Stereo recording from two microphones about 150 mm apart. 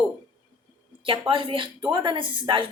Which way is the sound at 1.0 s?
35° right (ahead or behind).